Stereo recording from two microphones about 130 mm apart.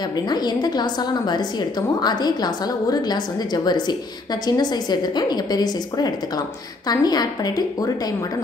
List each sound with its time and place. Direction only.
0.1 s a woman's voice: 35° left (ahead or behind)